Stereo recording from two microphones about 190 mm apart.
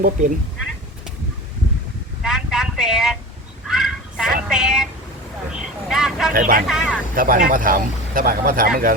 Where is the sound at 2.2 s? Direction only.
5° right (ahead or behind).